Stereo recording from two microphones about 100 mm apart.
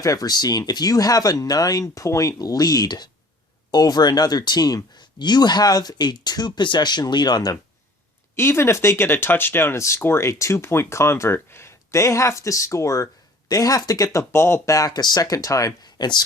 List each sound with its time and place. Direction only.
0.0 s speech: 35° left (ahead or behind)
8.4 s speech: 25° left (ahead or behind); by 16.2 s 45° left (ahead or behind)